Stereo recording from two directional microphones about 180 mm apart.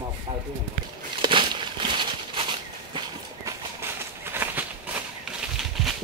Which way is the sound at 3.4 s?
15° right (ahead or behind).